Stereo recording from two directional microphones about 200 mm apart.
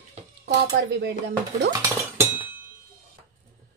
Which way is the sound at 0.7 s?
55° right (ahead or behind).